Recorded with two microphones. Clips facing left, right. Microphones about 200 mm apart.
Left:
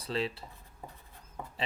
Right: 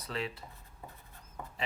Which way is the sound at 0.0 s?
30° left (ahead or behind).